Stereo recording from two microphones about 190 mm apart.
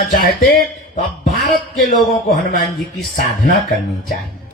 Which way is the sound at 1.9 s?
Centre (ahead or behind).